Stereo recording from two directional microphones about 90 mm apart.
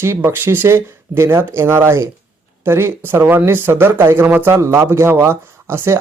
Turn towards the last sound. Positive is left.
turn(degrees=-30)  # may be behind; listen again after turning